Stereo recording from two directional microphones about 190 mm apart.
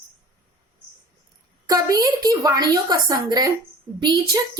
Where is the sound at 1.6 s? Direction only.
20° right (ahead or behind).